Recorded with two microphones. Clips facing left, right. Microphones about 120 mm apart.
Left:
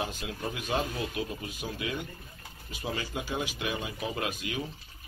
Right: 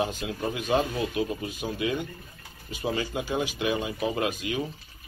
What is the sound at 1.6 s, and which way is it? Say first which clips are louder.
Speech: right 5 dB; 40° right (ahead or behind).